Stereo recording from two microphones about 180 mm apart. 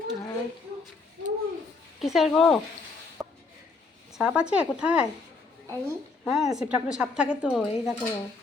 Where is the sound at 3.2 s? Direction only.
15° right (ahead or behind).